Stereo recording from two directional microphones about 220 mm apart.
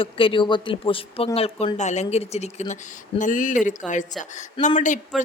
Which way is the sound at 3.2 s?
35° left (ahead or behind).